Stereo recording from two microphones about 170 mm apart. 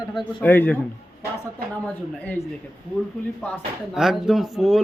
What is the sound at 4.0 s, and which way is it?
Speech, centre (ahead or behind).